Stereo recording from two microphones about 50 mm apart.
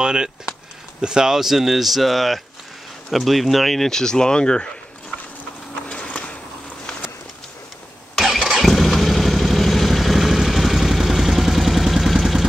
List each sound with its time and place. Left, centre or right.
0.0 s speech: centre
5.9 s a sound: left
8.2 s vehicle: centre